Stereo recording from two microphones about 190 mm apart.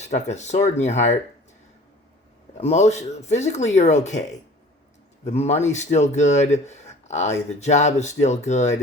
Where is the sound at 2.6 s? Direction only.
35° left (ahead or behind).